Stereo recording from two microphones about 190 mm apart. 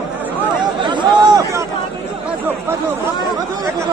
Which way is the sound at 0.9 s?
20° right (ahead or behind).